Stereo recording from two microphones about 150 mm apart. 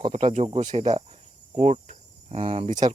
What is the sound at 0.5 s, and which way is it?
Speech, 50° right (ahead or behind).